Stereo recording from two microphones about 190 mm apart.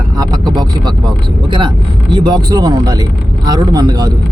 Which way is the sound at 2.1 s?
25° right (ahead or behind).